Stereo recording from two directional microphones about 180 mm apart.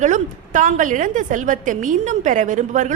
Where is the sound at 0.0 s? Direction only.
45° right (ahead or behind).